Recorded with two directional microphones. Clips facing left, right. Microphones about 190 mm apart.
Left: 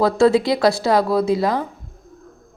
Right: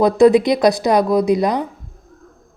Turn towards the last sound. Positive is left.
turn(degrees=-20)  # may be behind; listen again after turning